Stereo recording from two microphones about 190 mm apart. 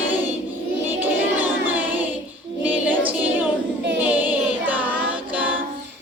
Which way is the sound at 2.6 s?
10° right (ahead or behind).